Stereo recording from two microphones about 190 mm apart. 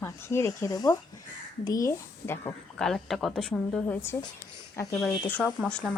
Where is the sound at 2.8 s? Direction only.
Centre (ahead or behind).